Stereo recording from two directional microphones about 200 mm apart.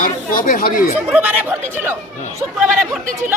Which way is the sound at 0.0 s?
45° left (ahead or behind).